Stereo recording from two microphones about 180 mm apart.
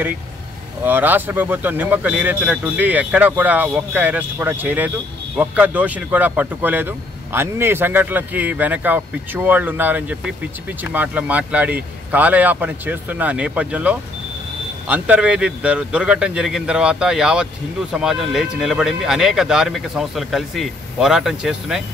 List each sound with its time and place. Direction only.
0.8 s speech: 10° right (ahead or behind)